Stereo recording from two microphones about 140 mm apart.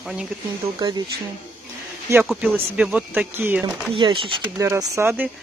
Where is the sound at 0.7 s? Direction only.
30° right (ahead or behind).